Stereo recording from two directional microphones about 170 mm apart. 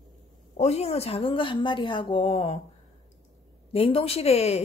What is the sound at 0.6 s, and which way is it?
Speech, 40° left (ahead or behind).